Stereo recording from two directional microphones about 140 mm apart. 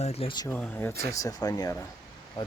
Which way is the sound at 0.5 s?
10° left (ahead or behind).